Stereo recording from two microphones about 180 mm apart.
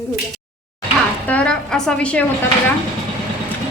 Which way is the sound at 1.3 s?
5° left (ahead or behind).